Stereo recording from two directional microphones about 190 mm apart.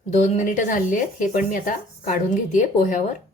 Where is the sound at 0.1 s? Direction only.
40° left (ahead or behind).